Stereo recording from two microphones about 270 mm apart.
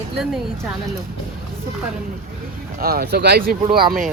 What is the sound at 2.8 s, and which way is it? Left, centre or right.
Speech, right.